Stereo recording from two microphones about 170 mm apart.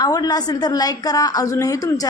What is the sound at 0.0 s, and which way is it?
A woman's voice, 20° left (ahead or behind).